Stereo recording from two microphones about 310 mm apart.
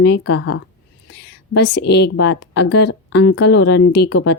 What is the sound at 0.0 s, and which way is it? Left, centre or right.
A woman's voice, left.